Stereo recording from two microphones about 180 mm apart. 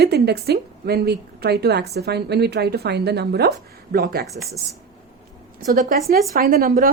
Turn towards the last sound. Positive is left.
turn(degrees=-55)  # may be behind; listen again after turning